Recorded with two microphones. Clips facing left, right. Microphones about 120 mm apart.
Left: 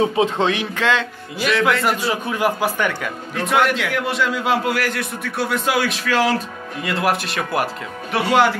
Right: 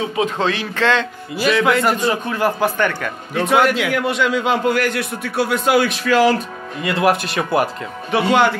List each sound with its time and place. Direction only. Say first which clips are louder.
0.1 s speech: left 1 dB; 20° left (ahead or behind)
1.3 s a man's voice: right 3 dB; 5° right (ahead or behind)
2.0 s a man's voice: right 2 dB; 10° left (ahead or behind)